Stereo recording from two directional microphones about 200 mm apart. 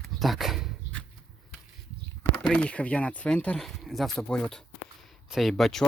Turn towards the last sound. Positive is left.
turn(degrees=0)  # may be behind; listen again after turning